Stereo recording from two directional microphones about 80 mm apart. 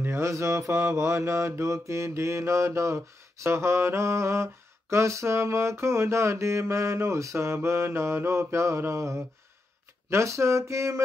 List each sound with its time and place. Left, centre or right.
0.0 s mantra: right